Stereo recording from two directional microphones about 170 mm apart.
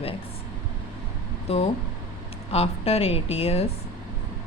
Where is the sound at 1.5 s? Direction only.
35° left (ahead or behind).